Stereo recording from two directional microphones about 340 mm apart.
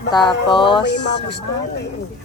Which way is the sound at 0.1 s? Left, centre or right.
Centre.